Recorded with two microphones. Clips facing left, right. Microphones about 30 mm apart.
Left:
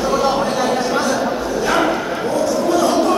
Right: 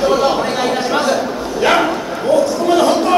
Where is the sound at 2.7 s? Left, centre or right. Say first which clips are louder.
Right 2 dB; right.